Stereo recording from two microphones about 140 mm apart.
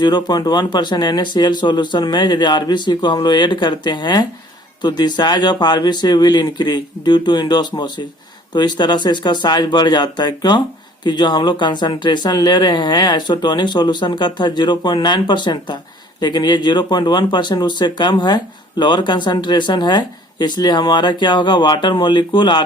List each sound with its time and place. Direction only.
0.0 s speech: 30° left (ahead or behind)